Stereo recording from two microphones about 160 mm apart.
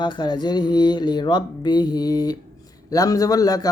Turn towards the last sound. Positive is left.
turn(degrees=25)  # may be behind; listen again after turning